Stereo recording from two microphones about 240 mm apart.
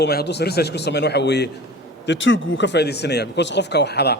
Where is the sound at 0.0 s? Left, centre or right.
Left.